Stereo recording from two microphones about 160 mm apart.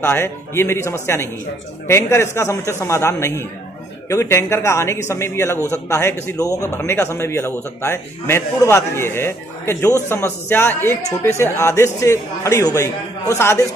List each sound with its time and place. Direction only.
0.0 s a man's voice: 15° left (ahead or behind)